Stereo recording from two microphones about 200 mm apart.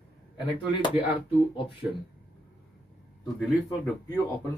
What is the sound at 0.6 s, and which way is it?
Speech, 25° left (ahead or behind).